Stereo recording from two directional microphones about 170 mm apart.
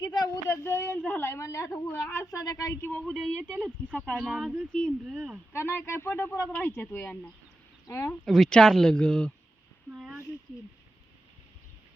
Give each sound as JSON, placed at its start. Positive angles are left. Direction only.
{"t": 0.0, "sound": "speech", "side_deg": 25}
{"t": 3.1, "sound": "speech", "side_deg": 0}
{"t": 5.5, "sound": "speech", "side_deg": 15}
{"t": 8.2, "sound": "speech", "side_deg": 0}
{"t": 9.9, "sound": "a sound", "side_deg": 0}